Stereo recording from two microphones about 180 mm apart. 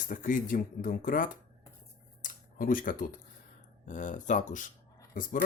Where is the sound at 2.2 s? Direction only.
50° left (ahead or behind).